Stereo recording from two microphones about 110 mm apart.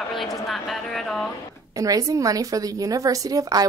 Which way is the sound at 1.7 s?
30° right (ahead or behind).